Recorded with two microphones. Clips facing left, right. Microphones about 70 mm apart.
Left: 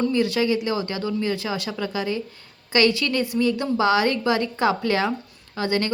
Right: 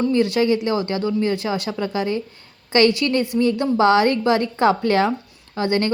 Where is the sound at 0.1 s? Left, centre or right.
Right.